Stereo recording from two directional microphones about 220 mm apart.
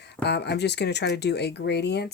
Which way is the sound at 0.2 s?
50° left (ahead or behind).